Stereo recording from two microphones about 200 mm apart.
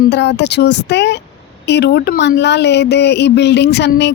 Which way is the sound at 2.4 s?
60° left (ahead or behind).